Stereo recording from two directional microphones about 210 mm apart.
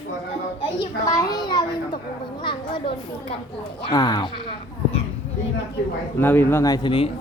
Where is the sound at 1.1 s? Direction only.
15° left (ahead or behind).